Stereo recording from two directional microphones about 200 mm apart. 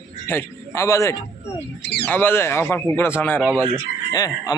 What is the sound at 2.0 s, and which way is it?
Speech, 10° left (ahead or behind).